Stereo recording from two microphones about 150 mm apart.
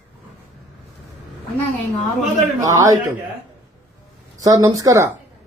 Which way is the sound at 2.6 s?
20° right (ahead or behind).